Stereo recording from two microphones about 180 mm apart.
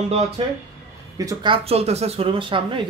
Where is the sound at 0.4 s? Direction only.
25° right (ahead or behind).